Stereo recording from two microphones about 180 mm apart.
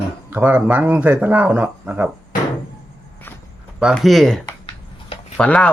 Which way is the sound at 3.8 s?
Centre (ahead or behind).